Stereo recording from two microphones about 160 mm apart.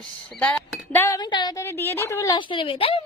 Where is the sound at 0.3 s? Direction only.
10° left (ahead or behind).